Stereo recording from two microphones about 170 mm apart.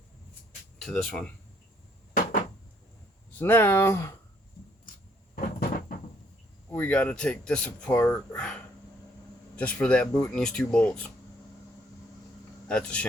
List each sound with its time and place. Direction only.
0.8 s speech: 5° left (ahead or behind)
3.3 s speech: 10° left (ahead or behind)
5.3 s cupboard open or close: 55° left (ahead or behind)
6.7 s speech: 10° left (ahead or behind)
12.6 s speech: 5° left (ahead or behind)